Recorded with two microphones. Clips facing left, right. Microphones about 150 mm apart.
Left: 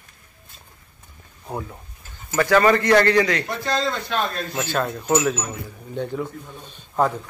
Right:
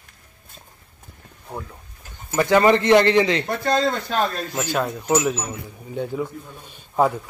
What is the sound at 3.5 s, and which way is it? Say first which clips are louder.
Speech: right 3 dB; 50° right (ahead or behind).